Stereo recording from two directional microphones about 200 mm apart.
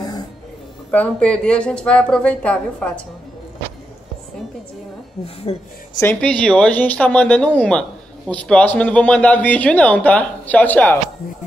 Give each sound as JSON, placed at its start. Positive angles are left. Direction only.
{"t": 0.9, "sound": "a woman's voice", "side_deg": 5}
{"t": 5.2, "sound": "speech", "side_deg": 30}
{"t": 5.9, "sound": "speech", "side_deg": 10}